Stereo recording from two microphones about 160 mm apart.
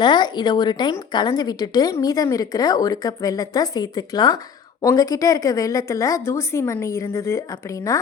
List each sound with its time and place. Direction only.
0.0 s a woman's voice: 30° left (ahead or behind)